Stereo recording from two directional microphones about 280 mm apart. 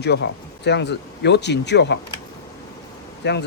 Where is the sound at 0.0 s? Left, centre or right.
Left.